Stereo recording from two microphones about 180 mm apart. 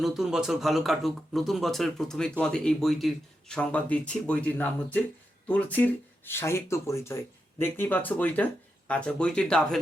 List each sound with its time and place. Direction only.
0.0 s speech: centre (ahead or behind)